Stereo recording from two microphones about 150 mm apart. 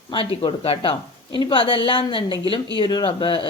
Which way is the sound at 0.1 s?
35° left (ahead or behind).